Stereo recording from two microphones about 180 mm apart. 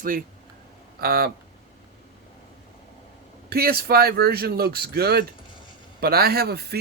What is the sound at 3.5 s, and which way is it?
Speech, 60° right (ahead or behind).